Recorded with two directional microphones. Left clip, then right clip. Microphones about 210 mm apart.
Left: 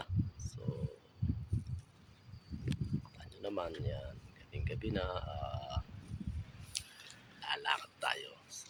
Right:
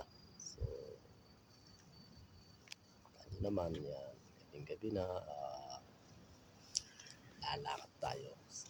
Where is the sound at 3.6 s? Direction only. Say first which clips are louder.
Left 1 dB; centre (ahead or behind).